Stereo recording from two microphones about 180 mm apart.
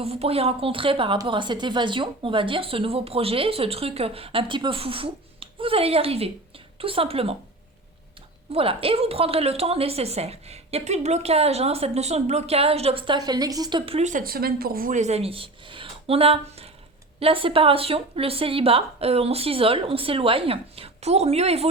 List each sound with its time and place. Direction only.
0.0 s a woman's voice: 35° right (ahead or behind)
8.5 s a woman's voice: 30° right (ahead or behind)